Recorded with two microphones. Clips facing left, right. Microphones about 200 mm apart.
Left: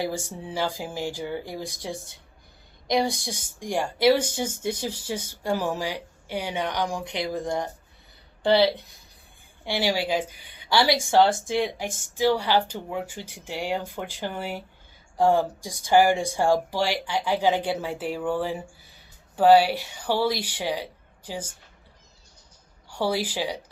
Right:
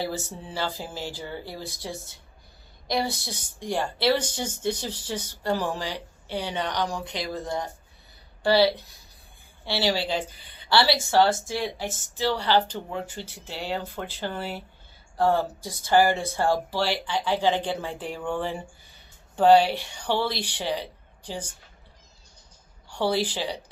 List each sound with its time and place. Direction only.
0.0 s speech: 10° left (ahead or behind)
22.9 s speech: 10° left (ahead or behind)